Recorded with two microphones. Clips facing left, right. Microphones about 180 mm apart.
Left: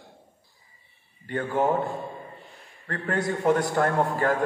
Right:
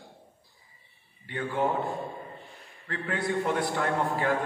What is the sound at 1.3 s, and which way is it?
Speech, 45° left (ahead or behind).